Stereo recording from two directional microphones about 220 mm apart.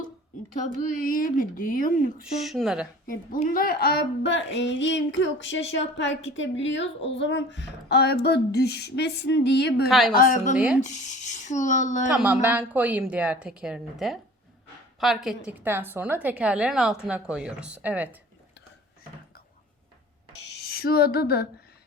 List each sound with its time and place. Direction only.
0.8 s speech: 35° left (ahead or behind)
2.4 s a woman's voice: centre (ahead or behind)
3.1 s a woman's voice: 40° left (ahead or behind)
10.2 s speech: 40° left (ahead or behind)
12.0 s a woman's voice: 5° right (ahead or behind)
20.7 s a woman's voice: 45° left (ahead or behind)